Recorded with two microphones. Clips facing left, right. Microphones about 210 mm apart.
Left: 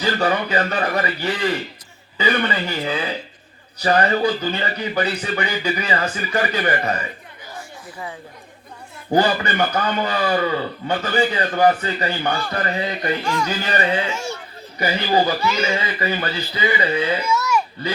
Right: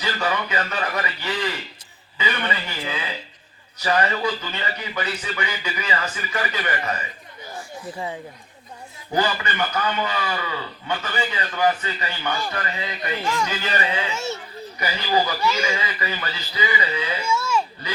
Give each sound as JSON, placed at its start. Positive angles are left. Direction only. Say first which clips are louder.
{"t": 0.0, "sound": "a man's voice", "louder": "left 5 dB", "side_deg": 35}
{"t": 9.1, "sound": "a man's voice", "louder": "left 5 dB", "side_deg": 35}
{"t": 17.2, "sound": "a sound", "louder": "left 3 dB", "side_deg": -25}